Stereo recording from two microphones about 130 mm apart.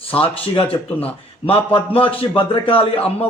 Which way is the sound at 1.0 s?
45° left (ahead or behind).